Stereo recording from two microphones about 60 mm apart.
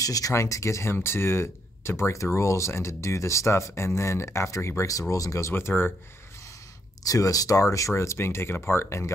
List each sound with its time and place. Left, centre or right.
0.0 s speech: left
0.3 s speech: left
0.9 s speech: left
5.1 s speech: left
5.5 s speech: left
7.1 s speech: left
7.9 s speech: left